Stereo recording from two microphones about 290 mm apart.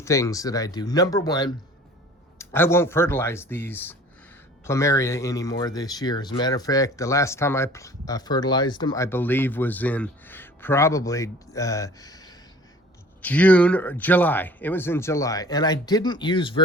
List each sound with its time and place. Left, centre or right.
0.0 s speech: centre